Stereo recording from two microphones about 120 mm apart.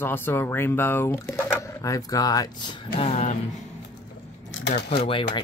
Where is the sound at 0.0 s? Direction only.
15° left (ahead or behind).